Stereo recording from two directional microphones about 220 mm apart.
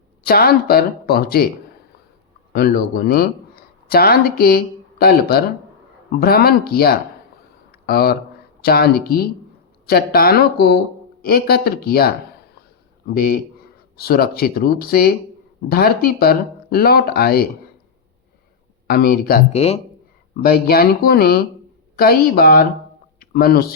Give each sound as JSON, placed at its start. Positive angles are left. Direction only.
{"t": 0.3, "sound": "speech", "side_deg": 45}
{"t": 2.5, "sound": "speech", "side_deg": 45}
{"t": 7.7, "sound": "a sound", "side_deg": 45}
{"t": 8.6, "sound": "speech", "side_deg": 45}
{"t": 13.1, "sound": "speech", "side_deg": 45}
{"t": 18.9, "sound": "speech", "side_deg": 45}
{"t": 19.5, "sound": "speech", "side_deg": 30}
{"t": 20.3, "sound": "speech", "side_deg": 45}